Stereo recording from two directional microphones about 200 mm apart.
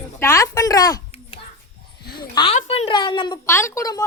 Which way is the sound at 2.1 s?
25° left (ahead or behind).